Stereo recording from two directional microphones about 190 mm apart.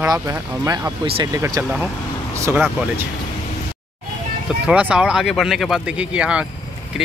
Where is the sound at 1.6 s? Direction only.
5° right (ahead or behind).